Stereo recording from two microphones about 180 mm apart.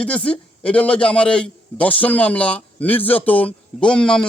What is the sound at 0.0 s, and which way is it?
Speech, 5° left (ahead or behind).